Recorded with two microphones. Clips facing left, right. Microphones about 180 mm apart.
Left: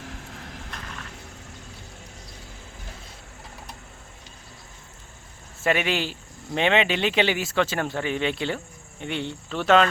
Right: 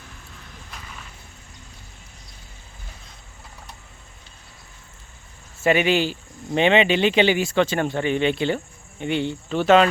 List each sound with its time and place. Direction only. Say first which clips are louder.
0.0 s vehicle: left 6 dB; 90° left
5.6 s speech: right 5 dB; centre (ahead or behind)